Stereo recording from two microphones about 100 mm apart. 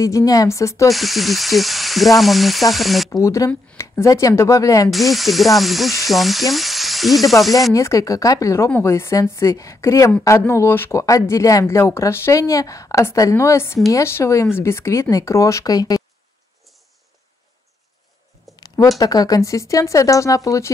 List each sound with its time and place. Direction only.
0.0 s speech: 35° left (ahead or behind)
0.8 s sizzle: centre (ahead or behind)
3.1 s speech: 30° left (ahead or behind)
4.9 s sizzle: centre (ahead or behind)
7.7 s speech: 30° left (ahead or behind)
8.6 s speech: 20° left (ahead or behind); by 16.0 s 35° left (ahead or behind)
18.5 s a sound: centre (ahead or behind)
18.9 s speech: 35° left (ahead or behind)